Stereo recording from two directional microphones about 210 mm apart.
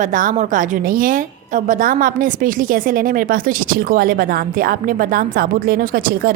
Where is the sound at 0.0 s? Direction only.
40° right (ahead or behind).